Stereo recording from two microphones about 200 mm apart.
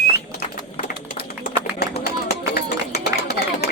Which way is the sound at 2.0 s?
55° left (ahead or behind).